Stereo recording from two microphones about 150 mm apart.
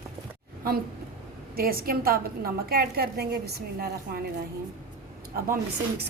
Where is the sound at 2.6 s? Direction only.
90° right.